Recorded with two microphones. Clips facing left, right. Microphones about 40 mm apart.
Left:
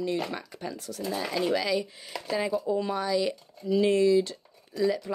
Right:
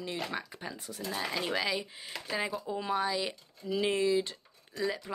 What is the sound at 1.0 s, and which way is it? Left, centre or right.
Speech, centre.